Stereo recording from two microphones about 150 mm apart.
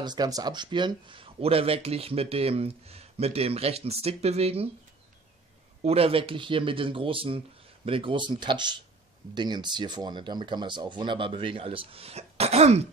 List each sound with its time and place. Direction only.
0.0 s speech: 25° right (ahead or behind); by 4.6 s 45° right (ahead or behind)
5.9 s speech: 40° right (ahead or behind)